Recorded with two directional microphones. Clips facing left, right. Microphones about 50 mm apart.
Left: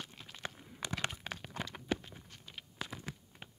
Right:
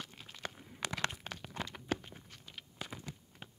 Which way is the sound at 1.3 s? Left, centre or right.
Left.